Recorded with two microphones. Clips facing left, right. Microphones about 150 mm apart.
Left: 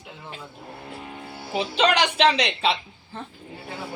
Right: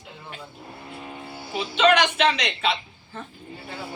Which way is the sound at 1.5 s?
35° left (ahead or behind).